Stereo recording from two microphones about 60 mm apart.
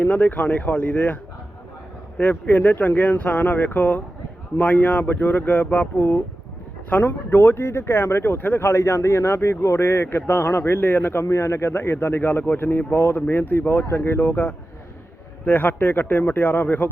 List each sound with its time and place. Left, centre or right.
0.0 s speech: left
7.3 s speech: left